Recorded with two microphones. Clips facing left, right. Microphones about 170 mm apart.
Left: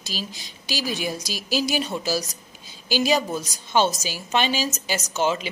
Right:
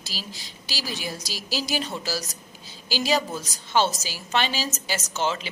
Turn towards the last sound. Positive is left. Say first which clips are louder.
# left 4 dB
turn(degrees=15)  # may be behind; listen again after turning